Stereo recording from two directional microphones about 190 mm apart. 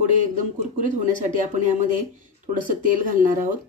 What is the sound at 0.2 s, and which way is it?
Speech, 40° right (ahead or behind).